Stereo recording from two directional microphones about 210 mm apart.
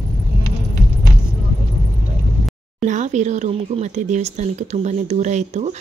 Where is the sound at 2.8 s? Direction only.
35° right (ahead or behind).